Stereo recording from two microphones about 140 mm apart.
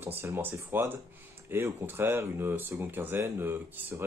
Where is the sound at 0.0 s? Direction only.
15° right (ahead or behind).